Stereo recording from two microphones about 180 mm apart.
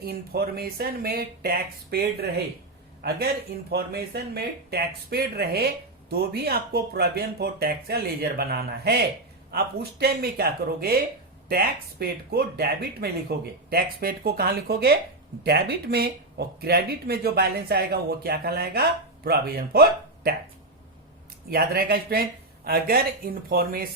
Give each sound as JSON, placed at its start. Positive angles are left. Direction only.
{"t": 0.0, "sound": "speech", "side_deg": -60}
{"t": 3.7, "sound": "speech", "side_deg": -60}
{"t": 21.5, "sound": "speech", "side_deg": -60}